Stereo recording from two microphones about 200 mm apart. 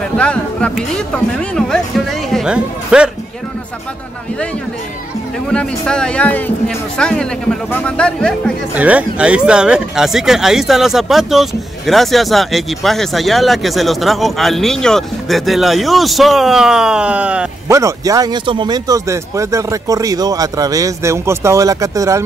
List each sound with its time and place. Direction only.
0.2 s speech: 5° left (ahead or behind)
5.5 s speech: 5° left (ahead or behind)
8.7 s speech: 5° right (ahead or behind)